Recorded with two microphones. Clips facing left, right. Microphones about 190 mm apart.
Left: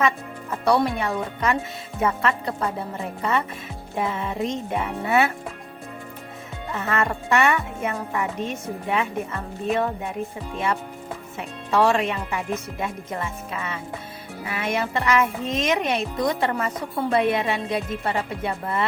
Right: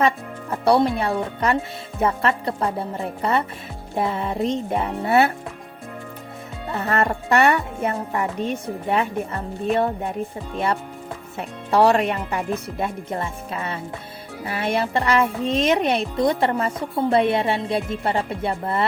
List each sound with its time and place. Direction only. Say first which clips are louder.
0.6 s speech: right 3 dB; 30° right (ahead or behind)
6.7 s speech: right 3 dB; 35° right (ahead or behind)
11.3 s speech: right 3 dB; 35° right (ahead or behind)